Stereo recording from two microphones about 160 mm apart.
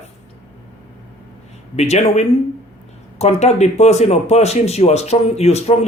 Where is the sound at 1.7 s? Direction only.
45° left (ahead or behind).